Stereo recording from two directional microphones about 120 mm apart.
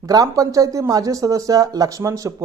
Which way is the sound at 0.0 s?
30° right (ahead or behind).